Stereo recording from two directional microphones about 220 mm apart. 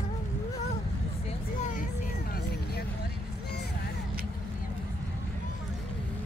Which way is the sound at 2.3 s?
45° left (ahead or behind).